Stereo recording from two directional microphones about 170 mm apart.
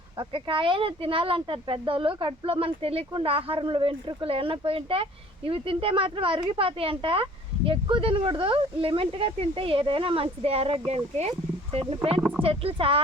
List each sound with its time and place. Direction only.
0.2 s speech: 30° right (ahead or behind)